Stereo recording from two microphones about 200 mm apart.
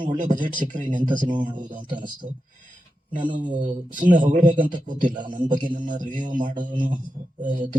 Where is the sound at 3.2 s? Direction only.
40° right (ahead or behind).